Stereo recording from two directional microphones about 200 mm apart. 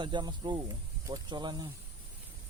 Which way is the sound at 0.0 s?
20° right (ahead or behind).